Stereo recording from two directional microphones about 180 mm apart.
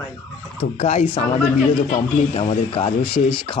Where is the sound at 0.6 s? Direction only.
35° left (ahead or behind).